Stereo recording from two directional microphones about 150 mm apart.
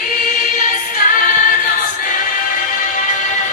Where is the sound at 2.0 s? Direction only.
65° left (ahead or behind).